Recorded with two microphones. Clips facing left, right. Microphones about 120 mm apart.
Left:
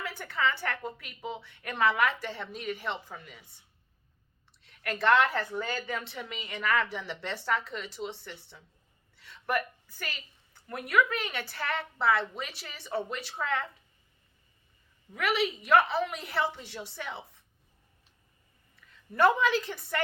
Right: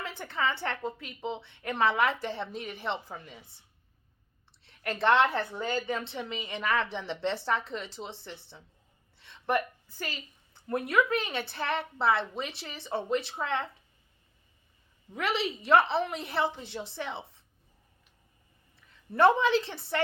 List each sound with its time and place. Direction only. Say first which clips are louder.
0.0 s a woman's voice: left 1 dB; 25° right (ahead or behind)
4.6 s a woman's voice: right 1 dB; 25° right (ahead or behind)
15.1 s a woman's voice: left 1 dB; 25° right (ahead or behind)
19.1 s a woman's voice: right 2 dB; 25° right (ahead or behind)